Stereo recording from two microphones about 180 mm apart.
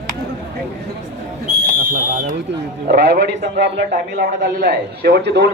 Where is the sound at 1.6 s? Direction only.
50° right (ahead or behind).